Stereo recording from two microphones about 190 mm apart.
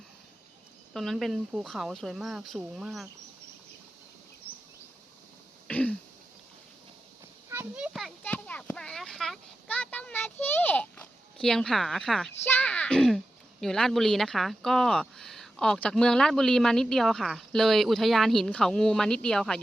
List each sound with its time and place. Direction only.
0.9 s speech: centre (ahead or behind)
5.6 s throat clearing: 10° left (ahead or behind)
7.5 s a sound: 10° right (ahead or behind)
7.9 s children playing: 5° left (ahead or behind)
12.5 s speech: 10° left (ahead or behind)